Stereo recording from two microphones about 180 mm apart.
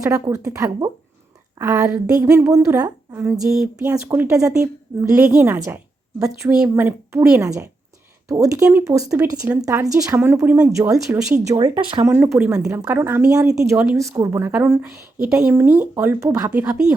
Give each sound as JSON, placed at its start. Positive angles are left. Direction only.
{"t": 0.0, "sound": "a woman's voice", "side_deg": -20}
{"t": 12.0, "sound": "a woman's voice", "side_deg": -10}
{"t": 16.5, "sound": "speech", "side_deg": -5}